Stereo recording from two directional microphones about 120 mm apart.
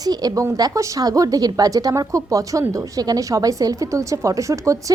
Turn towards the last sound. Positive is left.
turn(degrees=-25)  # may be behind; listen again after turning